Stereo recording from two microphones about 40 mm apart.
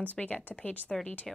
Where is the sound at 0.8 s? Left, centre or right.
Centre.